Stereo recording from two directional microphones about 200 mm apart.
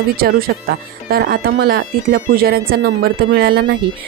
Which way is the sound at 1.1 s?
50° right (ahead or behind).